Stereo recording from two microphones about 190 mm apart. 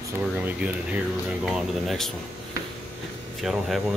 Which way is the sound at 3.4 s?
Centre (ahead or behind).